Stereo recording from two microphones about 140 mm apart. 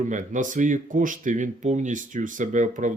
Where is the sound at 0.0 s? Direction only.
65° right (ahead or behind).